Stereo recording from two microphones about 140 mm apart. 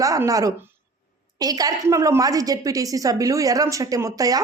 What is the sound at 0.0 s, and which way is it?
A woman's voice, 25° right (ahead or behind).